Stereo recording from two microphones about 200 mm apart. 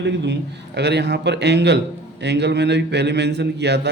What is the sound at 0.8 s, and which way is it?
A man's voice, 60° right (ahead or behind).